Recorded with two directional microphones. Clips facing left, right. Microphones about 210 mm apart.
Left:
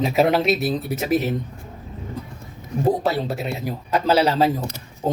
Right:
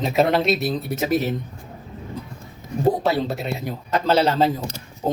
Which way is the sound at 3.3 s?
5° left (ahead or behind).